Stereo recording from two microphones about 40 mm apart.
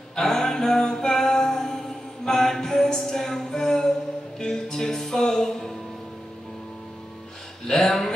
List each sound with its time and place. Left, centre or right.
0.1 s music: centre
7.6 s speech: centre